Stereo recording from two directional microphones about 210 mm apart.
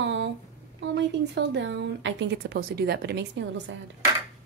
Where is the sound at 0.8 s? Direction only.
55° right (ahead or behind).